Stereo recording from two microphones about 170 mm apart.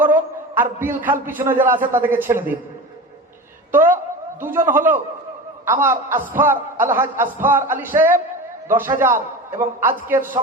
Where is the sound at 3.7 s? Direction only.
10° right (ahead or behind).